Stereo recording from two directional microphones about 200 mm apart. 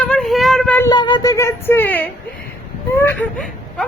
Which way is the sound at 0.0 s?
5° left (ahead or behind).